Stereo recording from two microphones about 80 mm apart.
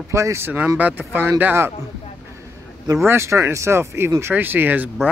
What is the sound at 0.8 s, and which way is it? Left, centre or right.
Speech, right.